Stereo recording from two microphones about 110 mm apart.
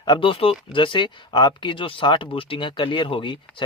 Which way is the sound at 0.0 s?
45° left (ahead or behind).